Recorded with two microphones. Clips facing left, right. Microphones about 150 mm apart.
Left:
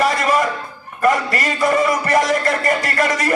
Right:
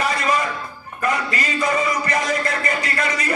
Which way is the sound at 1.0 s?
50° left (ahead or behind).